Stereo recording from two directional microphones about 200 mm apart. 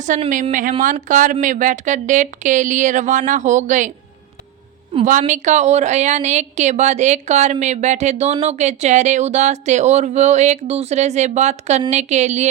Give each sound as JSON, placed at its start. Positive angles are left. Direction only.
{"t": 0.0, "sound": "a woman's voice", "side_deg": -40}
{"t": 5.0, "sound": "a woman's voice", "side_deg": -40}